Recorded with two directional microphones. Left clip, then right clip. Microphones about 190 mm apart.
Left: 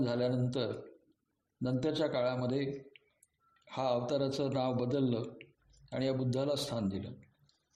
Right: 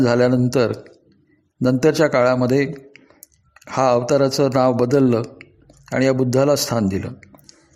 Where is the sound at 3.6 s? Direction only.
20° right (ahead or behind).